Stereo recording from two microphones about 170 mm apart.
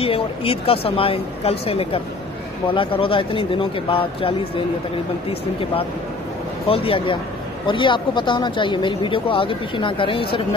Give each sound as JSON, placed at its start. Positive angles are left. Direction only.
{"t": 0.0, "sound": "speech", "side_deg": 35}
{"t": 6.7, "sound": "speech", "side_deg": 30}